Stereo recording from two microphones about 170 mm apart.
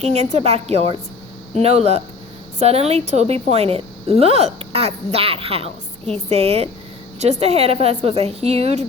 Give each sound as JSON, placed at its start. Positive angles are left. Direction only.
{"t": 0.0, "sound": "a woman's voice", "side_deg": -40}